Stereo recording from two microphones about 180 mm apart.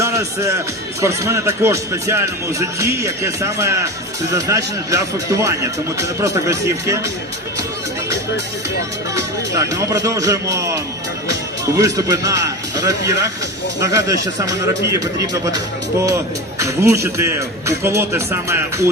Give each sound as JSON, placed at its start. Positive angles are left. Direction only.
{"t": 0.0, "sound": "speech", "side_deg": -15}
{"t": 9.1, "sound": "speech", "side_deg": -15}